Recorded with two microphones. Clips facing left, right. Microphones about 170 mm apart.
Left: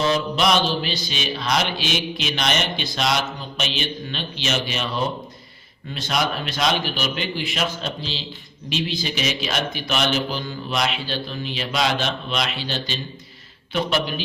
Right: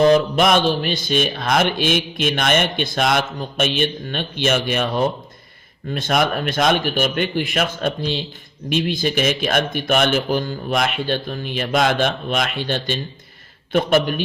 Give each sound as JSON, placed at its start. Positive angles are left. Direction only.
{"t": 0.0, "sound": "speech", "side_deg": -50}